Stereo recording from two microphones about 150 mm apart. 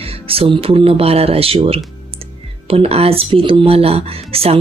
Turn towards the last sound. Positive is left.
turn(degrees=-40)  # may be behind; listen again after turning